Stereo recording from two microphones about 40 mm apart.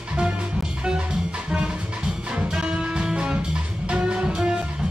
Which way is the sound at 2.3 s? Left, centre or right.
Centre.